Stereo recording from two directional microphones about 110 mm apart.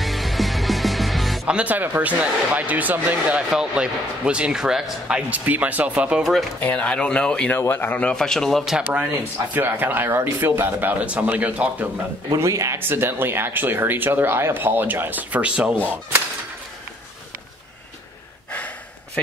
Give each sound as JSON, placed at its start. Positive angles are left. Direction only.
{"t": 0.0, "sound": "music", "side_deg": 0}
{"t": 1.5, "sound": "speech", "side_deg": -15}
{"t": 6.6, "sound": "speech", "side_deg": 10}
{"t": 9.5, "sound": "speech", "side_deg": -15}
{"t": 12.3, "sound": "speech", "side_deg": -30}